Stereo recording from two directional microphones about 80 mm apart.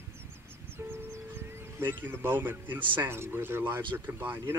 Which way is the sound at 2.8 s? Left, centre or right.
Right.